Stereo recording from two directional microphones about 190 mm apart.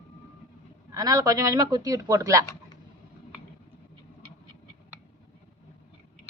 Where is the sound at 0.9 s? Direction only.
20° right (ahead or behind).